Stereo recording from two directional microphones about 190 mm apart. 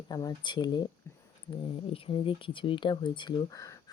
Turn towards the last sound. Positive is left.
turn(degrees=15)  # may be behind; listen again after turning